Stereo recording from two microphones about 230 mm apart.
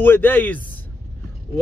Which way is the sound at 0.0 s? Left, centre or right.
Centre.